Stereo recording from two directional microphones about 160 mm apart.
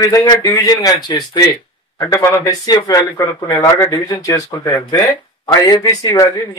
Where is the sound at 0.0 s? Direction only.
25° left (ahead or behind).